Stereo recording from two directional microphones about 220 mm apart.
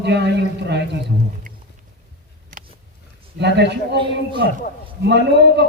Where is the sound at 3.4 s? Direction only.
50° right (ahead or behind).